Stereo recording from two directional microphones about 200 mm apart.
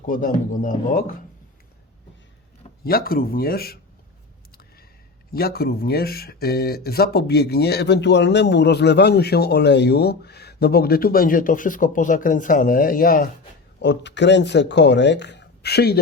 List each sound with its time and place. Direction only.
0.0 s speech: 40° left (ahead or behind)
2.8 s speech: 50° left (ahead or behind)
5.3 s speech: 50° left (ahead or behind)
13.8 s speech: 60° left (ahead or behind)